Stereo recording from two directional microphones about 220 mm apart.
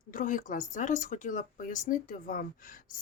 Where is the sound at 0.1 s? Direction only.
35° left (ahead or behind).